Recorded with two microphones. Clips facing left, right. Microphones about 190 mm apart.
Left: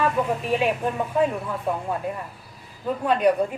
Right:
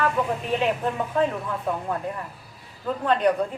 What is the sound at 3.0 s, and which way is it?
Speech, 10° left (ahead or behind).